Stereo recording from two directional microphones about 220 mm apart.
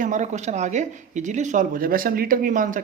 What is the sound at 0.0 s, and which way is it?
Speech, 35° right (ahead or behind).